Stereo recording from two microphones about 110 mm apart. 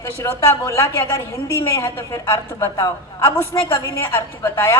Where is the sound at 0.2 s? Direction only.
30° left (ahead or behind).